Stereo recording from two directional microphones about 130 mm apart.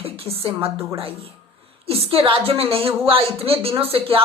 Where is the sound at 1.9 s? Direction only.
50° right (ahead or behind).